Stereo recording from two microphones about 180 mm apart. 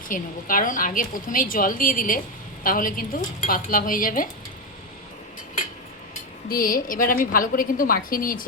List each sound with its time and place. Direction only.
0.1 s a woman's voice: 50° left (ahead or behind)
6.5 s a woman's voice: 55° left (ahead or behind)